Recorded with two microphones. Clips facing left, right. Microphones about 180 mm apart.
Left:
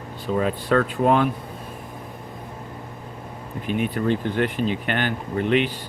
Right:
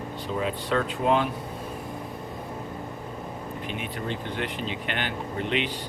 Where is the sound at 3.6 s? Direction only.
50° left (ahead or behind).